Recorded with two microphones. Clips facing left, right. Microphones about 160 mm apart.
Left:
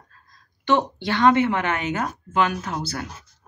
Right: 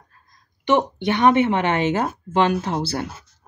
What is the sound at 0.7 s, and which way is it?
Speech, 20° right (ahead or behind).